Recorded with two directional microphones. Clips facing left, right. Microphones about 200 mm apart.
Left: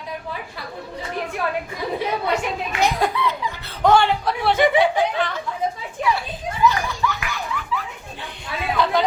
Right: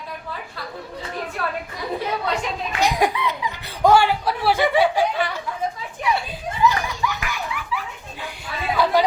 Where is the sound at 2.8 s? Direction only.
15° right (ahead or behind).